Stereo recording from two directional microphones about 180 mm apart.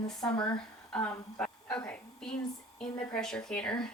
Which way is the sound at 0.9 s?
5° left (ahead or behind).